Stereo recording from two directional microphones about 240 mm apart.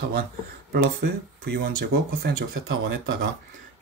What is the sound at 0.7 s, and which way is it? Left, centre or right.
Speech, right.